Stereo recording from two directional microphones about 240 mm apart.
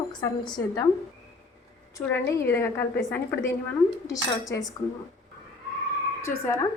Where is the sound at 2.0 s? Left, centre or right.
Centre.